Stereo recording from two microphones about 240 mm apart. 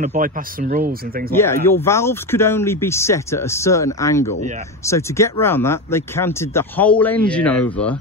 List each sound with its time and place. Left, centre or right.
0.0 s speech: right
1.3 s speech: centre